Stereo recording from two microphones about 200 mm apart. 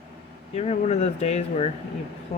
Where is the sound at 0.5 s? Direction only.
30° left (ahead or behind).